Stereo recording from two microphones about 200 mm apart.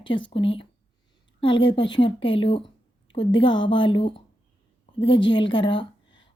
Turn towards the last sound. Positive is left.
turn(degrees=25)  # may be behind; listen again after turning